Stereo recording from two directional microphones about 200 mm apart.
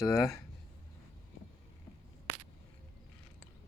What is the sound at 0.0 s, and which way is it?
Speech, 15° left (ahead or behind).